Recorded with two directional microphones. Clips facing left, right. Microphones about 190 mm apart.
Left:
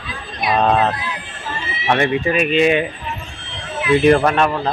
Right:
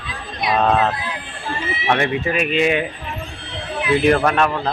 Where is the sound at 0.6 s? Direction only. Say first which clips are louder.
Left 1 dB; 15° left (ahead or behind).